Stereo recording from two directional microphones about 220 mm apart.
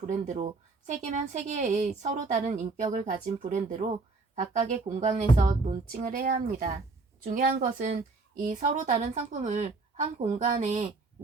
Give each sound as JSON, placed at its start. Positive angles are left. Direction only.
{"t": 0.0, "sound": "a woman's voice", "side_deg": -35}